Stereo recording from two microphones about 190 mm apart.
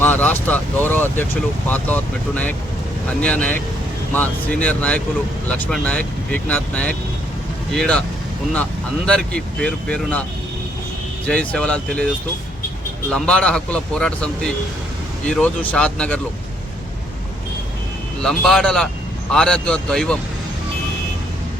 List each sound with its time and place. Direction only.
0.0 s speech: 10° left (ahead or behind)
9.0 s speech: 5° left (ahead or behind)
11.3 s speech: 5° left (ahead or behind)
18.2 s speech: centre (ahead or behind)